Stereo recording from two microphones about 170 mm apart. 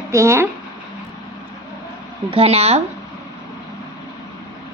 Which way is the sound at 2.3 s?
35° right (ahead or behind).